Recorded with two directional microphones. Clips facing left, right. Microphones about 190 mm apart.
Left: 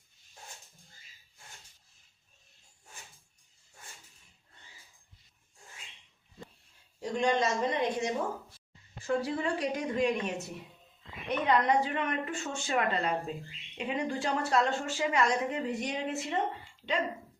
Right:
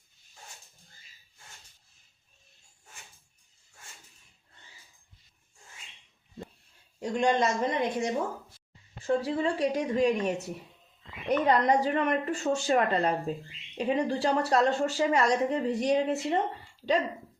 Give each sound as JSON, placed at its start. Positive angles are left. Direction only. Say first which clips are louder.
{"t": 7.0, "sound": "a woman's voice", "louder": "right 3 dB", "side_deg": -50}
{"t": 9.0, "sound": "a woman's voice", "louder": "right 3 dB", "side_deg": -30}